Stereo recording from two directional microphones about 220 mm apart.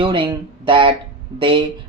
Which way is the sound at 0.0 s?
20° right (ahead or behind).